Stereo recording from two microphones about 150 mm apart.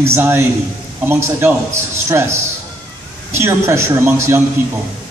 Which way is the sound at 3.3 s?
15° right (ahead or behind).